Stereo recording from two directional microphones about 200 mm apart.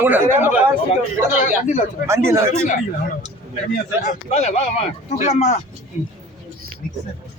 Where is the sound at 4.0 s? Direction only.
35° left (ahead or behind).